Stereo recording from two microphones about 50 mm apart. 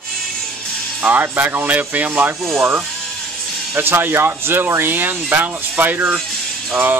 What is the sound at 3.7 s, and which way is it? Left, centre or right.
Speech, right.